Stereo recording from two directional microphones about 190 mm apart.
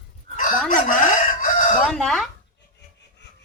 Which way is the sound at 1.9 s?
Centre (ahead or behind).